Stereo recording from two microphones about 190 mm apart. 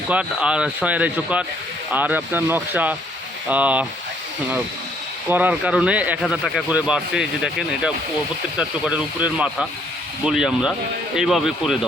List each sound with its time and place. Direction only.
0.1 s speech: 5° right (ahead or behind)
5.3 s speech: 10° right (ahead or behind)